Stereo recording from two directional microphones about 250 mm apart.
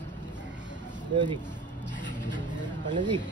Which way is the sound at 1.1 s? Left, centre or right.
Centre.